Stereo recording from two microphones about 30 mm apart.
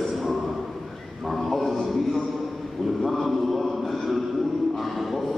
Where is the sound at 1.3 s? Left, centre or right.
Centre.